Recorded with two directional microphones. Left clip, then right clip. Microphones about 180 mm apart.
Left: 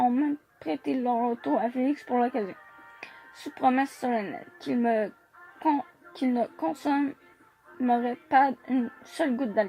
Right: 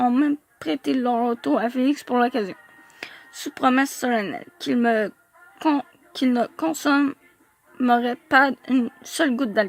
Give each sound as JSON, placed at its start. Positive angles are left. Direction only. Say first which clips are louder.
{"t": 0.0, "sound": "a child's voice", "louder": "right 5 dB", "side_deg": -40}